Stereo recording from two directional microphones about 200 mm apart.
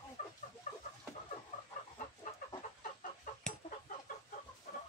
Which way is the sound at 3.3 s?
40° left (ahead or behind).